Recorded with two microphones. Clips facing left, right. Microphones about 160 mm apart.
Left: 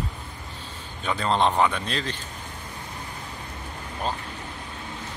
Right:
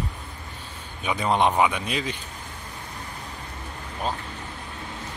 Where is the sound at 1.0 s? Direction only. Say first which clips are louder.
Right 1 dB; 10° right (ahead or behind).